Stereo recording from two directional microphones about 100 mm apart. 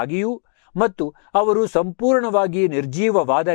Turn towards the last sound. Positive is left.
turn(degrees=15)  # may be behind; listen again after turning